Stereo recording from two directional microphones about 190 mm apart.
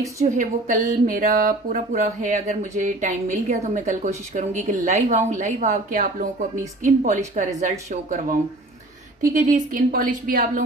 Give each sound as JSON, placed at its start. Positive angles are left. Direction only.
{"t": 0.2, "sound": "a woman's voice", "side_deg": -40}